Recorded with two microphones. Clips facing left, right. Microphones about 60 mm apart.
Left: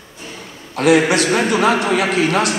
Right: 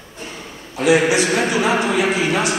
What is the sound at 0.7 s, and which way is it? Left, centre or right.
A man's voice, left.